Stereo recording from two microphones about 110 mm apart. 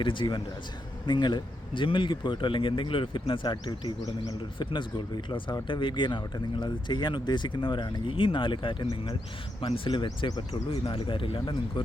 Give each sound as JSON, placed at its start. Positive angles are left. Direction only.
{"t": 0.0, "sound": "speech", "side_deg": 50}
{"t": 10.7, "sound": "speech", "side_deg": 55}